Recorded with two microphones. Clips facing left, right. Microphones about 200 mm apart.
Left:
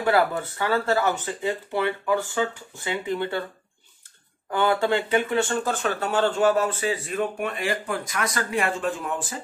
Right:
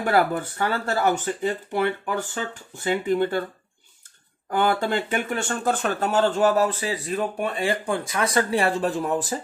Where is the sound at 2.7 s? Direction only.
45° right (ahead or behind).